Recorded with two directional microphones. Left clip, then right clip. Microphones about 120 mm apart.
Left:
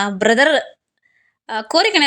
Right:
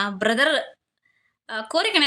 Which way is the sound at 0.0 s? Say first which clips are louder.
Left 6 dB; 55° left (ahead or behind).